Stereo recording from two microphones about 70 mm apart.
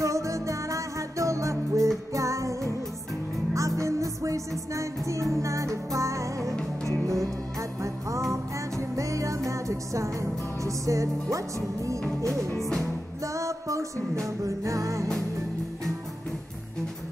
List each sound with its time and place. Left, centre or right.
0.0 s music: right
8.3 s music: right
12.5 s music: centre
13.2 s music: right